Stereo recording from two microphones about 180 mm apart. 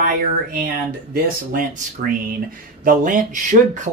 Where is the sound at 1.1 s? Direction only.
50° right (ahead or behind).